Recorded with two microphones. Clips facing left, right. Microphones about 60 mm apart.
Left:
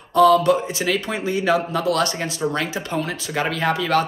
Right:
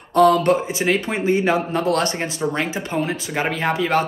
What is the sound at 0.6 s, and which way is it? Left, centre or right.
Speech, right.